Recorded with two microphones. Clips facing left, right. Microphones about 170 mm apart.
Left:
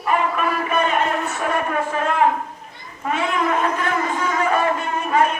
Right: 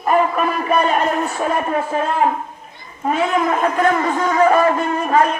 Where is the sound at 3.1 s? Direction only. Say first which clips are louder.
Right 3 dB; 40° right (ahead or behind).